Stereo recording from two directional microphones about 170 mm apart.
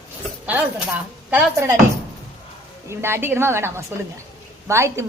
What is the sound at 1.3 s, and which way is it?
Speech, 10° right (ahead or behind).